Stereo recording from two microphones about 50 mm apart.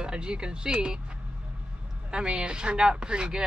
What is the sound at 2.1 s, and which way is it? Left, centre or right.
Speech, centre.